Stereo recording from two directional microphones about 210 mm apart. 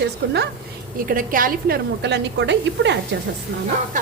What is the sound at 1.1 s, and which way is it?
A woman's voice, 40° right (ahead or behind).